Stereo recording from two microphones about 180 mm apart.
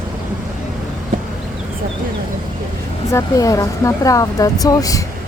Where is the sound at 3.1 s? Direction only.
20° left (ahead or behind).